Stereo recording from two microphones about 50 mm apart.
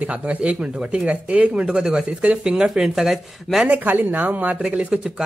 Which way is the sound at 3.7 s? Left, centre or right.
Right.